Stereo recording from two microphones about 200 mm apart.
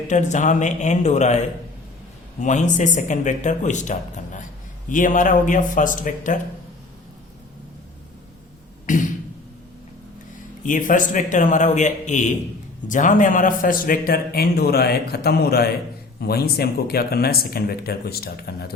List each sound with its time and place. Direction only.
0.1 s speech: 35° left (ahead or behind)
10.6 s a man's voice: 40° left (ahead or behind)